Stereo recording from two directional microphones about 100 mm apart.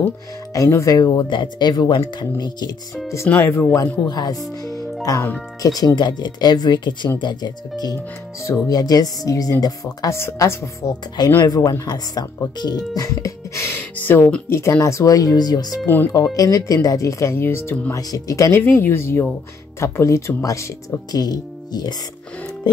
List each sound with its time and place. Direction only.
0.5 s speech: 30° left (ahead or behind)
3.3 s speech: 30° left (ahead or behind)
18.1 s speech: 35° left (ahead or behind)
18.6 s speech: 20° left (ahead or behind); by 21.9 s 45° left (ahead or behind)